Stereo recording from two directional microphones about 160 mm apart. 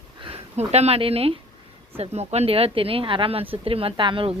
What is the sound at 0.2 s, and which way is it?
Speech, 35° right (ahead or behind).